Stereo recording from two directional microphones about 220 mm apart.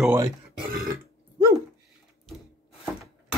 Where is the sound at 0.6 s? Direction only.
40° right (ahead or behind).